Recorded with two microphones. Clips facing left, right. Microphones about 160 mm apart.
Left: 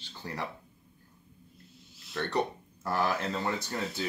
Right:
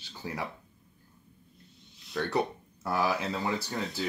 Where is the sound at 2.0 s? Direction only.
Centre (ahead or behind).